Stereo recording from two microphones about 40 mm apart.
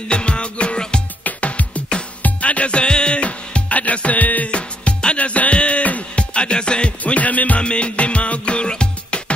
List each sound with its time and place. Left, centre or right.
0.1 s music: left
1.2 s music: left
4.5 s music: left
7.0 s music: left
7.6 s music: left